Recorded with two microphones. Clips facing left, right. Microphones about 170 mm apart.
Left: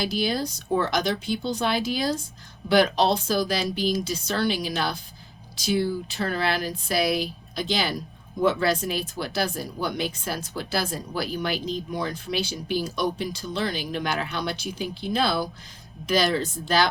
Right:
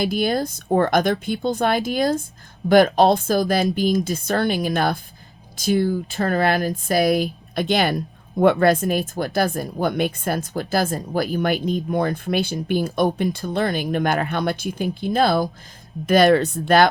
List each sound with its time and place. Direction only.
0.0 s speech: 50° right (ahead or behind)